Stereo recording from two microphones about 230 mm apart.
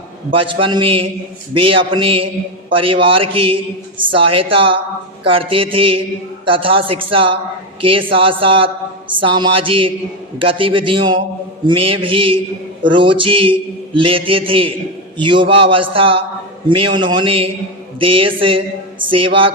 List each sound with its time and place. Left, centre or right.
0.3 s a man's voice: right